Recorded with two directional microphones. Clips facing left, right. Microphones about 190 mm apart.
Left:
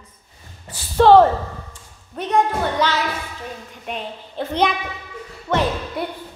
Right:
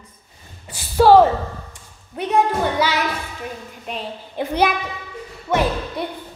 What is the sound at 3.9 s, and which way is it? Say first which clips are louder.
A woman's voice: even; centre (ahead or behind).